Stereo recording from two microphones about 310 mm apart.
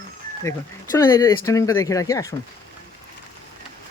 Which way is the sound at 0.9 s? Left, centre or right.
Centre.